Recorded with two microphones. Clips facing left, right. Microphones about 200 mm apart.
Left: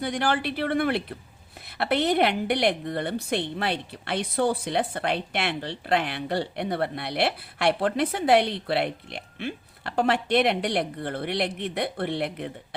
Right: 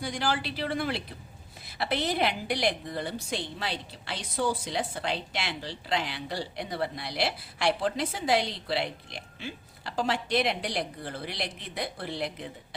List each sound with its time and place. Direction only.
0.0 s a woman's voice: 60° left (ahead or behind)